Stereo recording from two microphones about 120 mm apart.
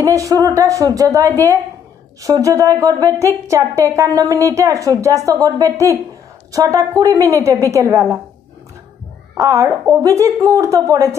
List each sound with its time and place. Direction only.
0.0 s a woman's voice: 25° right (ahead or behind)
9.4 s a woman's voice: 30° right (ahead or behind)